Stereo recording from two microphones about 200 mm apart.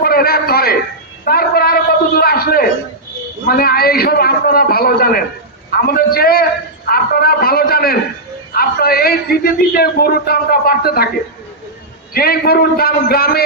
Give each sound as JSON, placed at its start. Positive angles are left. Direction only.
{"t": 0.0, "sound": "a sound", "side_deg": 50}
{"t": 3.4, "sound": "a man's voice", "side_deg": 50}
{"t": 12.1, "sound": "a man's voice", "side_deg": 50}